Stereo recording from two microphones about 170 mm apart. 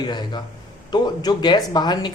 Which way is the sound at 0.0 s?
25° left (ahead or behind).